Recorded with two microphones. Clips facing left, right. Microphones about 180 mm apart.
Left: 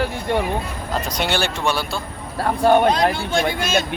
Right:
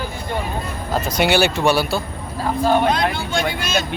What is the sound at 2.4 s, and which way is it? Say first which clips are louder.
Speech: left 2 dB; 55° left (ahead or behind).